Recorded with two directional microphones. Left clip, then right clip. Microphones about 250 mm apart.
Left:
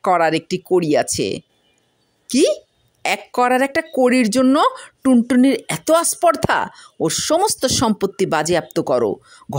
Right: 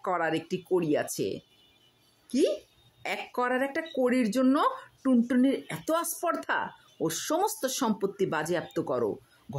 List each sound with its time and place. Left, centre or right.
0.0 s speech: left